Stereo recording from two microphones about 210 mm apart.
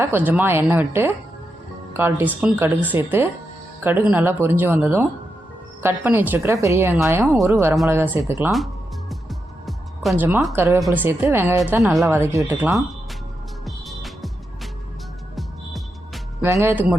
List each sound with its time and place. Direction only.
0.0 s speech: 10° right (ahead or behind)
8.5 s music: centre (ahead or behind)
9.6 s a woman's voice: centre (ahead or behind)
13.7 s music: centre (ahead or behind)
16.4 s speech: 10° right (ahead or behind)